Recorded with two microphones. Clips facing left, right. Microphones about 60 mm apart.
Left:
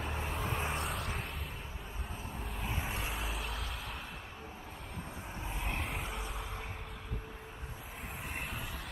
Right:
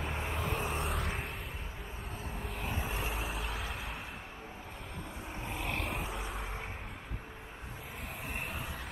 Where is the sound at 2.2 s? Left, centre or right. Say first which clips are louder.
Right 2 dB; right.